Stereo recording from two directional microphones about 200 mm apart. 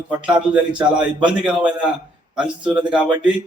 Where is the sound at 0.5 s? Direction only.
5° right (ahead or behind).